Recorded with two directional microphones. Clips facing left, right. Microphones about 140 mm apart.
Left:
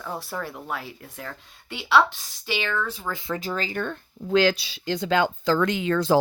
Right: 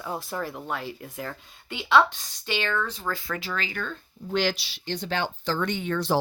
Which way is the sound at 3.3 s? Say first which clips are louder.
Left 4 dB; 40° left (ahead or behind).